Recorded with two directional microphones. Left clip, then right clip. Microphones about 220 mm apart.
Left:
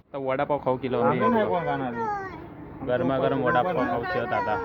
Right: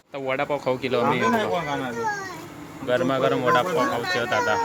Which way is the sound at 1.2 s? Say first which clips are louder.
Right 1 dB; 40° left (ahead or behind).